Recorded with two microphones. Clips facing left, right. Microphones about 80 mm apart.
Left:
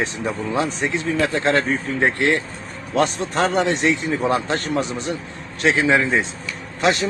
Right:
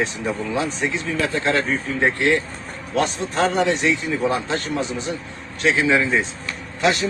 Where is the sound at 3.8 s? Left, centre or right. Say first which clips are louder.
Left 1 dB; left.